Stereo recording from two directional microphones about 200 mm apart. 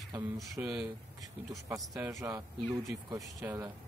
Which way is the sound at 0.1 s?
15° right (ahead or behind).